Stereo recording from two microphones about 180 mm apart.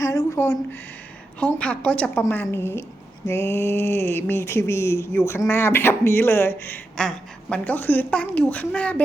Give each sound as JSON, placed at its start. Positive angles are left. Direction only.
{"t": 0.0, "sound": "speech", "side_deg": 20}